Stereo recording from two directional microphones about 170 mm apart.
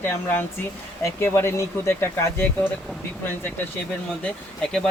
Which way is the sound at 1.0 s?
15° left (ahead or behind).